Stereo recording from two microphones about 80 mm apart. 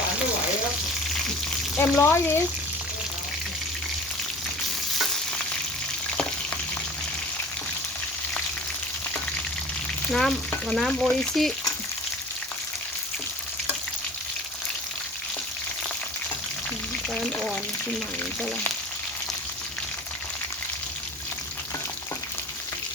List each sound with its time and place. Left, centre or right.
1.8 s speech: left
10.1 s frying: centre
17.2 s frying: centre